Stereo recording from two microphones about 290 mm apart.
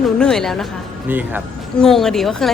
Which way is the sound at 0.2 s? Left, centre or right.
Centre.